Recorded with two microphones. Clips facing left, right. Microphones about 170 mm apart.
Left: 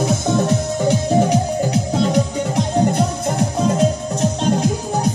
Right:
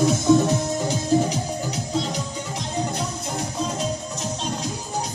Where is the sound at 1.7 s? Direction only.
60° left (ahead or behind).